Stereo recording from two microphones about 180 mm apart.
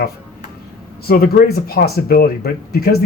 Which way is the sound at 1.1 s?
60° left (ahead or behind).